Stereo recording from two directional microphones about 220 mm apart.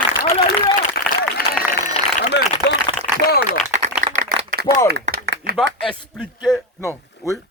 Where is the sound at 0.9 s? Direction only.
45° left (ahead or behind).